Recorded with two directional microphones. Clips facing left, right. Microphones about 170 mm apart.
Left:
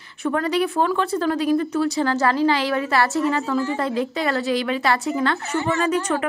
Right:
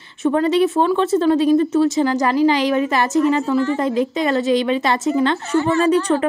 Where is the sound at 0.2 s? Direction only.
25° right (ahead or behind).